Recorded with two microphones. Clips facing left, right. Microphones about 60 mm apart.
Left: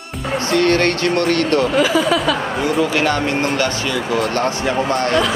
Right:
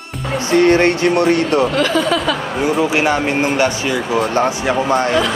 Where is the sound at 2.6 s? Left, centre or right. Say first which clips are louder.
Right 4 dB; centre.